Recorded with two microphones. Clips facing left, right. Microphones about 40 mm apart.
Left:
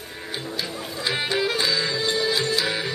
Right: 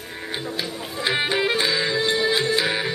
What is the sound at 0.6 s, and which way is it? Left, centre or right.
Music, right.